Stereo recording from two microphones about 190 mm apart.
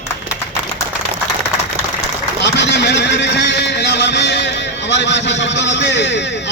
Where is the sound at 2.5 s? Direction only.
65° left (ahead or behind).